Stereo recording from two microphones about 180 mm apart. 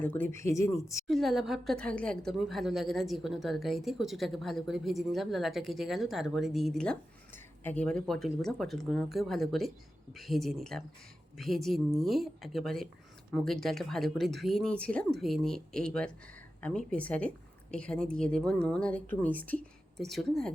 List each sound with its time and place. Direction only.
0.0 s speech: 10° left (ahead or behind)
1.0 s a woman's voice: centre (ahead or behind)